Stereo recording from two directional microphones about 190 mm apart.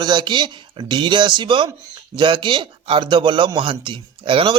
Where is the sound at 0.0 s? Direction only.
25° right (ahead or behind).